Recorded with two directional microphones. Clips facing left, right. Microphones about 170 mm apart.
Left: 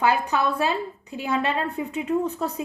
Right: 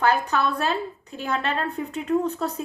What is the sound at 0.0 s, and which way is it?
A woman's voice, 10° left (ahead or behind).